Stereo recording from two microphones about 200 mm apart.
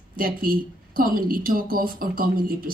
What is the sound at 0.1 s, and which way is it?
Speech, 45° right (ahead or behind).